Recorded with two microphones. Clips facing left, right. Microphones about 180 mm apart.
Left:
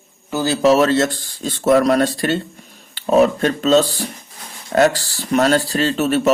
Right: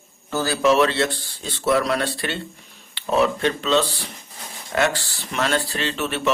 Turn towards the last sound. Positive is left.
turn(degrees=40)  # may be behind; listen again after turning